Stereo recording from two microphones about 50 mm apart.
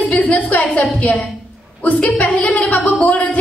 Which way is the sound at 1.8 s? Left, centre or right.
Left.